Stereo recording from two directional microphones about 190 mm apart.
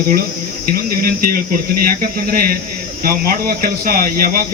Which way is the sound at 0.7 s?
50° right (ahead or behind).